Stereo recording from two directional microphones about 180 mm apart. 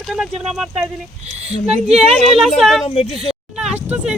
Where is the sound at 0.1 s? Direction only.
5° right (ahead or behind).